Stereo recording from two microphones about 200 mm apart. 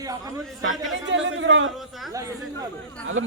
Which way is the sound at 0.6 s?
75° right (ahead or behind).